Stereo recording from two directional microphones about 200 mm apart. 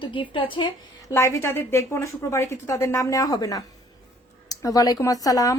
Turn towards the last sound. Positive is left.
turn(degrees=15)  # may be behind; listen again after turning